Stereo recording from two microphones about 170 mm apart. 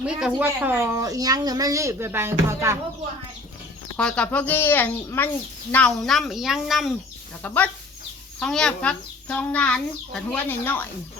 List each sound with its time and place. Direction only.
0.0 s speech: 5° right (ahead or behind)
3.9 s a child's voice: 5° left (ahead or behind)
7.4 s a child's voice: 10° left (ahead or behind)